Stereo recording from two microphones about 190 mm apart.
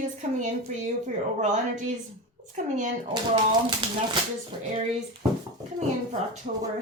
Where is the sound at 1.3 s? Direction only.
40° right (ahead or behind).